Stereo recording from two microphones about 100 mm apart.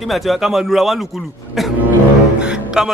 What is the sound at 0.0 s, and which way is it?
A man's voice, centre (ahead or behind).